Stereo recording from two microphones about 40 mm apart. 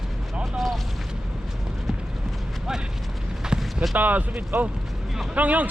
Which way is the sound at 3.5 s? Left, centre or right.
Right.